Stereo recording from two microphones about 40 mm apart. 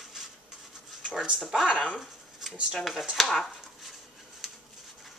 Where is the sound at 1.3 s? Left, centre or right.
Centre.